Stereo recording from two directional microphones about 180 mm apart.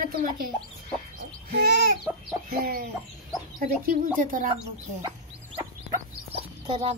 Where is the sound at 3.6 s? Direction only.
50° right (ahead or behind).